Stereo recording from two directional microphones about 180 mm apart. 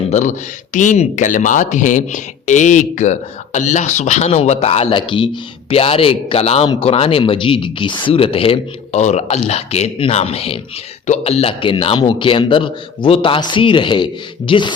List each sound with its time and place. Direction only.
0.1 s a man's voice: 45° left (ahead or behind); by 14.7 s 25° left (ahead or behind)